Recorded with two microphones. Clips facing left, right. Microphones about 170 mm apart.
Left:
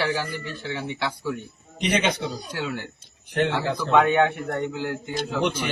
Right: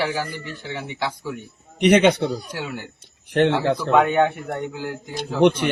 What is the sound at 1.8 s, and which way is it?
Speech, 65° right (ahead or behind).